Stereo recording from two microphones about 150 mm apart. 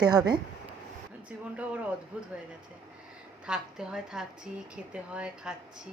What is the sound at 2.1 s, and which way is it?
Speech, 10° right (ahead or behind).